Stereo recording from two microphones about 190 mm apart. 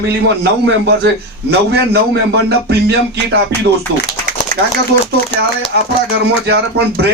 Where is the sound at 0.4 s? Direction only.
60° right (ahead or behind).